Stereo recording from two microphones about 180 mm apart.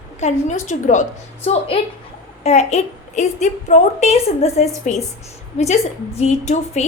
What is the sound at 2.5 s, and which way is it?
A woman's voice, 35° left (ahead or behind).